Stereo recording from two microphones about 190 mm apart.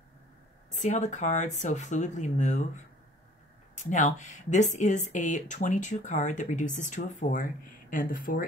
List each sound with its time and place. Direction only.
0.7 s speech: 40° left (ahead or behind)
3.7 s speech: 40° left (ahead or behind)